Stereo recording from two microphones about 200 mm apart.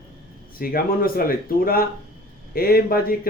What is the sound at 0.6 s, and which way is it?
Speech, 45° left (ahead or behind).